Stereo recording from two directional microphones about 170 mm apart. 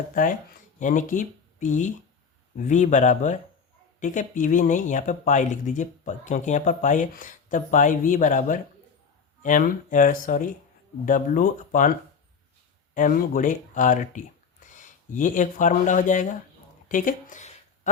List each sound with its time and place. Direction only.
0.1 s speech: 50° left (ahead or behind)